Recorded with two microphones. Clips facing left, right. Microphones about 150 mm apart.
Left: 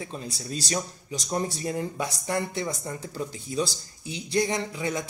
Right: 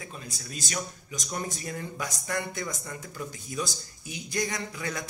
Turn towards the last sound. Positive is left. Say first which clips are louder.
# left 6 dB
turn(degrees=25)  # may be behind; listen again after turning